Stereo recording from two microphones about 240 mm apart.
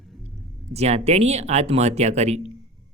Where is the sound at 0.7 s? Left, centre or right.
Right.